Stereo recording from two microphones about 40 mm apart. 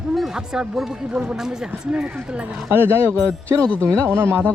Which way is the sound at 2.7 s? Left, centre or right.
Right.